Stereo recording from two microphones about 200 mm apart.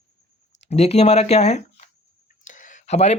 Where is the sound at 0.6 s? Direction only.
30° left (ahead or behind).